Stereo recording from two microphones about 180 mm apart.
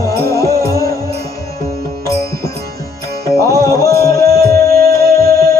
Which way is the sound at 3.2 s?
20° left (ahead or behind).